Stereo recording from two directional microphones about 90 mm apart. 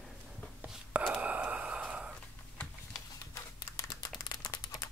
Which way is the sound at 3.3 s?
40° left (ahead or behind).